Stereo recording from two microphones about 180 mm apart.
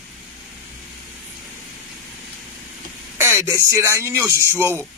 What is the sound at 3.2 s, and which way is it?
Speech, 15° right (ahead or behind).